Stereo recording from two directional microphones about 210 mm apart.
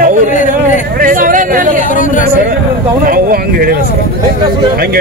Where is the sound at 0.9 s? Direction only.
40° right (ahead or behind).